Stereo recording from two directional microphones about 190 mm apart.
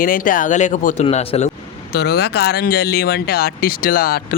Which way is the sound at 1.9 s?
55° left (ahead or behind).